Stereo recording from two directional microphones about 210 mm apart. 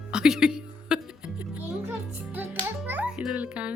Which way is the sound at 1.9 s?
10° right (ahead or behind).